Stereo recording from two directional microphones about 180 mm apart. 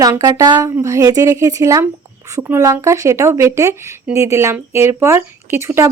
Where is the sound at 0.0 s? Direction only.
20° right (ahead or behind).